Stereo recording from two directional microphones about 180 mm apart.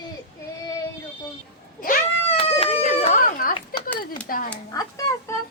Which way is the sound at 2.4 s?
35° left (ahead or behind).